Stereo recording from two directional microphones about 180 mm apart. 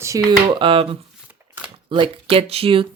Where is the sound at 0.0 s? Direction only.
15° right (ahead or behind).